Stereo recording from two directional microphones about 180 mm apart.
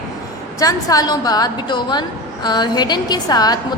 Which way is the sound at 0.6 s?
20° left (ahead or behind).